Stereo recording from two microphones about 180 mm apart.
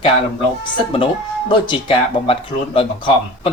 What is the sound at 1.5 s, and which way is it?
Speech, 30° left (ahead or behind).